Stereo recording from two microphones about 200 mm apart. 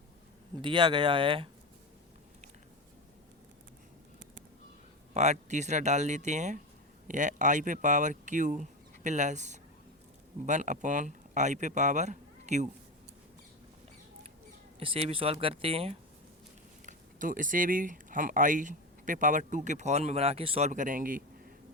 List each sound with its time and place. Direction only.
0.6 s speech: 25° right (ahead or behind)
5.1 s speech: 35° right (ahead or behind)
14.8 s speech: 30° right (ahead or behind)
16.8 s speech: 40° right (ahead or behind)